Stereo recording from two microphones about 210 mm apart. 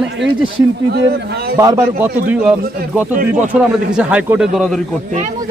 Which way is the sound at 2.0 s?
5° right (ahead or behind).